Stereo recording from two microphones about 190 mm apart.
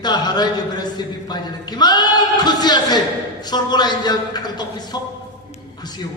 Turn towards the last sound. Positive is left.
turn(degrees=20)  # may be behind; listen again after turning